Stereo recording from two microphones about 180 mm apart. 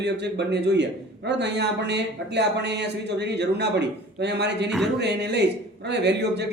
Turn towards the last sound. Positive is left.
turn(degrees=-70)  # may be behind; listen again after turning